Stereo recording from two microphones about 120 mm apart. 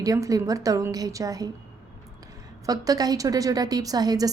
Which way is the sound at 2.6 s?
30° right (ahead or behind).